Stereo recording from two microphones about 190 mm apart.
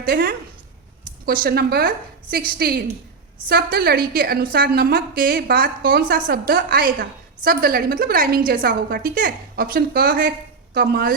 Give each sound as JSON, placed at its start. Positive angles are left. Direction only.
{"t": 0.0, "sound": "a woman's voice", "side_deg": -50}